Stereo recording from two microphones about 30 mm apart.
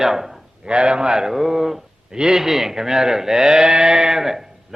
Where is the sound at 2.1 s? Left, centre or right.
Right.